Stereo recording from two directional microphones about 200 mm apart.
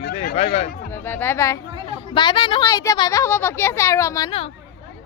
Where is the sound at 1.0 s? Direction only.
10° left (ahead or behind).